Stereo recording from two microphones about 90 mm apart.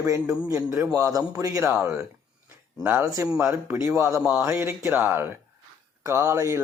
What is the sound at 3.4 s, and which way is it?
Speech, 30° right (ahead or behind).